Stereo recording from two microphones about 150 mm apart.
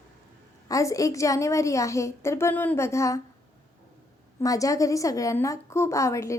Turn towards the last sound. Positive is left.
turn(degrees=20)  # may be behind; listen again after turning